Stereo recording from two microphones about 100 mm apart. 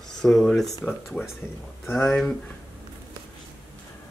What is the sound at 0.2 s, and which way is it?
Speech, 5° left (ahead or behind).